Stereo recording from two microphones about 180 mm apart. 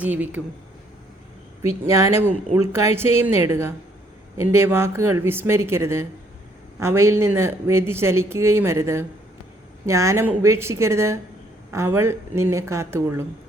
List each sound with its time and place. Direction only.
0.0 s speech: 10° right (ahead or behind)
1.9 s speech: 15° right (ahead or behind)